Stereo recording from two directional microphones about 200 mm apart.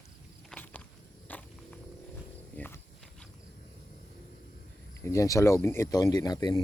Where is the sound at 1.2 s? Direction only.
5° left (ahead or behind).